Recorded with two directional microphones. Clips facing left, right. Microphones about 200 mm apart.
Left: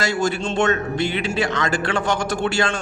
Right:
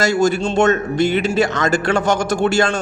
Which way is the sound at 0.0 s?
40° right (ahead or behind).